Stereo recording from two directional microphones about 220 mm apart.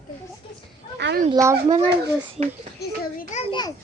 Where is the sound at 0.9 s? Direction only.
50° right (ahead or behind).